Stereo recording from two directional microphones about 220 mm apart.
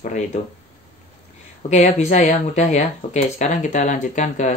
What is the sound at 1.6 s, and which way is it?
Speech, 35° left (ahead or behind).